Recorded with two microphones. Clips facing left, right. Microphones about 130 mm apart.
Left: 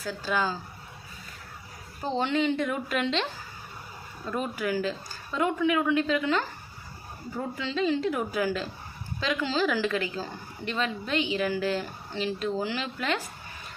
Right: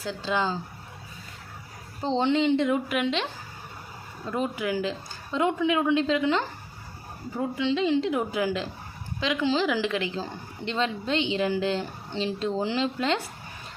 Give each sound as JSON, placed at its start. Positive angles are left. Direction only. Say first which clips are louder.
{"t": 0.0, "sound": "a woman's voice", "louder": "right 1 dB", "side_deg": -20}
{"t": 2.0, "sound": "a woman's voice", "louder": "right 3 dB", "side_deg": -25}
{"t": 4.3, "sound": "a woman's voice", "louder": "right 2 dB", "side_deg": -20}